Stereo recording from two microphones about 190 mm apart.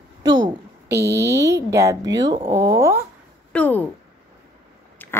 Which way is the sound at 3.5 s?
10° left (ahead or behind).